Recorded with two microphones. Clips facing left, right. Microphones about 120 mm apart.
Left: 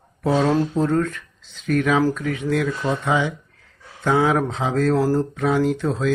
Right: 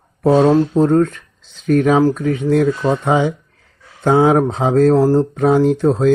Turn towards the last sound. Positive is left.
turn(degrees=-40)  # may be behind; listen again after turning